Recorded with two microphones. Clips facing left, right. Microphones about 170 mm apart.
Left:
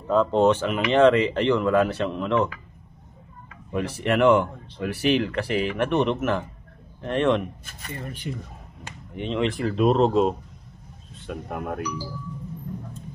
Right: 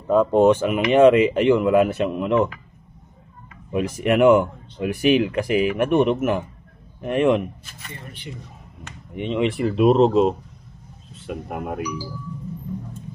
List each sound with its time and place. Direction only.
0.1 s speech: 10° right (ahead or behind)
3.9 s speech: 15° right (ahead or behind)
7.6 s speech: 40° left (ahead or behind)
9.1 s speech: 5° right (ahead or behind)